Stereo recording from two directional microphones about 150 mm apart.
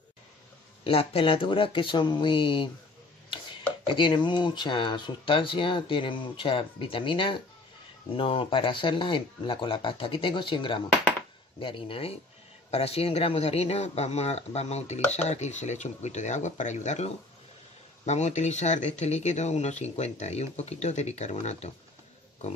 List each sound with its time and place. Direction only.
0.8 s speech: 40° left (ahead or behind)
3.8 s speech: 35° left (ahead or behind)